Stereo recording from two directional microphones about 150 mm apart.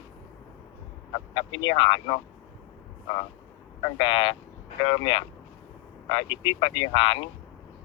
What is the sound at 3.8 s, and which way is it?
Speech, 35° left (ahead or behind).